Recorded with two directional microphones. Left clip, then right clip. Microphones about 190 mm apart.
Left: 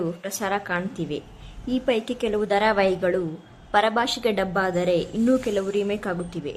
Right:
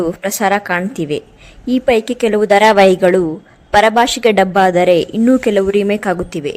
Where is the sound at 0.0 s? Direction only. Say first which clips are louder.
Right 12 dB; 40° right (ahead or behind).